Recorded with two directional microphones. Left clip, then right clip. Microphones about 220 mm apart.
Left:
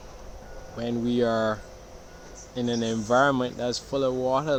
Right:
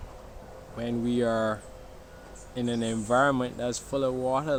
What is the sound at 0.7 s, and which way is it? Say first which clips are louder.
Speech: left 3 dB; centre (ahead or behind).